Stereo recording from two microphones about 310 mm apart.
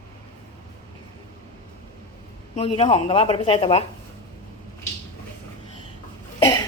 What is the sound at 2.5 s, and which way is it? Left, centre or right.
A woman's voice, centre.